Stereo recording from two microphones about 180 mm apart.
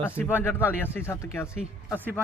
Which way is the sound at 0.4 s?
15° left (ahead or behind).